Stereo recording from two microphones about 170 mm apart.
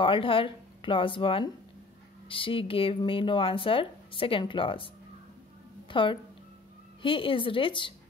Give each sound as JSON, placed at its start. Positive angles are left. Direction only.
{"t": 0.0, "sound": "speech", "side_deg": 30}
{"t": 5.9, "sound": "speech", "side_deg": 30}